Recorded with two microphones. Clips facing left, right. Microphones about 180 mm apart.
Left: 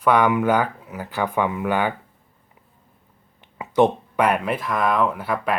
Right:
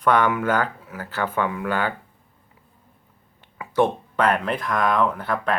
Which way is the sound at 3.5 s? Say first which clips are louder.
Left 3 dB; 20° left (ahead or behind).